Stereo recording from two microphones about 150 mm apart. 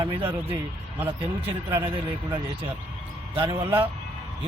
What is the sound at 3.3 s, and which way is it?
Speech, 35° right (ahead or behind).